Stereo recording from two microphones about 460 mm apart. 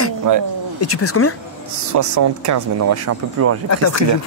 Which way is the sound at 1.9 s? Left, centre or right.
Right.